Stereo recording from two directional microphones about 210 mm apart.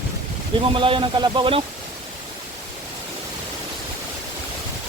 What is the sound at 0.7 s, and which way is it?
Speech, 25° right (ahead or behind).